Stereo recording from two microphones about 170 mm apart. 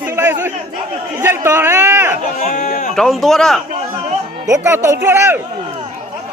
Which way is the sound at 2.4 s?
45° left (ahead or behind).